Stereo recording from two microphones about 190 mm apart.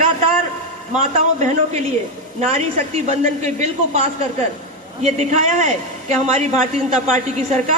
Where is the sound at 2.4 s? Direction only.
35° right (ahead or behind).